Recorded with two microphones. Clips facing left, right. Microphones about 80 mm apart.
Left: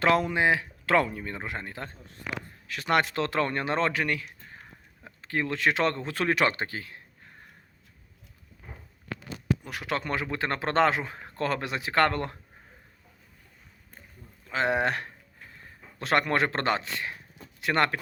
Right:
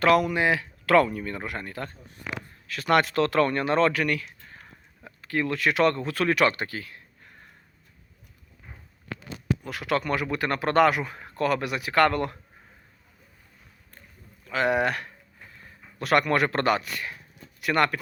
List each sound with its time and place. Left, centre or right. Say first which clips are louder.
0.0 s speech: right 2 dB; left
9.6 s speech: right 4 dB; left
14.4 s speech: right 2 dB; left